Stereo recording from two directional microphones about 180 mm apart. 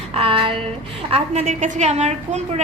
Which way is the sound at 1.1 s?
40° right (ahead or behind).